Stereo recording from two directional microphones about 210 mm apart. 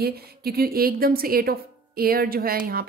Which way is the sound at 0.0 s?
50° right (ahead or behind).